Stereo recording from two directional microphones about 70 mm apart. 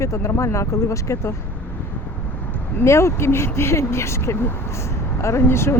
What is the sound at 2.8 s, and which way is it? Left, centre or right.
Speech, left.